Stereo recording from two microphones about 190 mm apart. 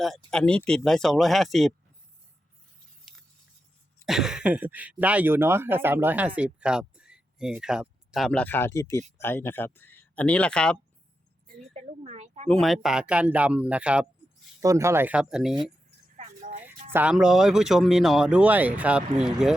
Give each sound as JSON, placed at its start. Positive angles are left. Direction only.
{"t": 0.3, "sound": "speech", "side_deg": 5}
{"t": 4.0, "sound": "speech", "side_deg": 0}
{"t": 11.7, "sound": "a woman's voice", "side_deg": -35}
{"t": 12.5, "sound": "speech", "side_deg": 0}
{"t": 16.1, "sound": "music", "side_deg": -40}
{"t": 16.6, "sound": "speech", "side_deg": -10}